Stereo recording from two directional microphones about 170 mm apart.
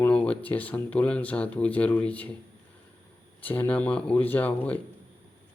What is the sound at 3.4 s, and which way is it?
Speech, 10° left (ahead or behind).